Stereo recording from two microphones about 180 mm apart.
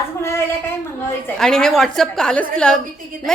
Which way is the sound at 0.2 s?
15° left (ahead or behind).